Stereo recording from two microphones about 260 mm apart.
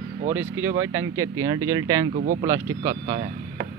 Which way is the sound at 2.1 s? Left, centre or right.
Right.